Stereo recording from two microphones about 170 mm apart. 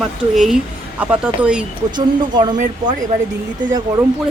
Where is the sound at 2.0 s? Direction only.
25° right (ahead or behind).